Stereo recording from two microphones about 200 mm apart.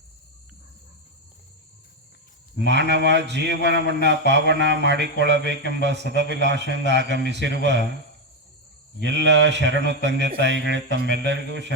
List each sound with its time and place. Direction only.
2.6 s a man's voice: 60° right (ahead or behind)
9.0 s a man's voice: 60° right (ahead or behind)